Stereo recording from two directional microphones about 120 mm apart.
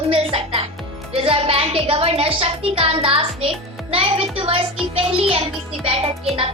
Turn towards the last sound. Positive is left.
turn(degrees=-50)  # may be behind; listen again after turning